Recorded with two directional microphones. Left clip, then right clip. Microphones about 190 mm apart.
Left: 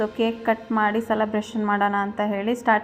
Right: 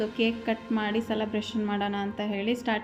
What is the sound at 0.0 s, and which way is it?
A woman's voice, 5° right (ahead or behind).